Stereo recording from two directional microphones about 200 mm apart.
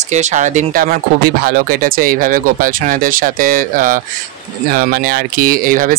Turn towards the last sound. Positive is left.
turn(degrees=-45)  # may be behind; listen again after turning